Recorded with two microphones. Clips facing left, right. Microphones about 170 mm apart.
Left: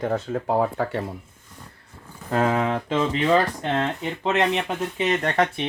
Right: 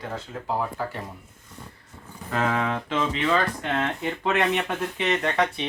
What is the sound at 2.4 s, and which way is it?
Speech, 25° left (ahead or behind).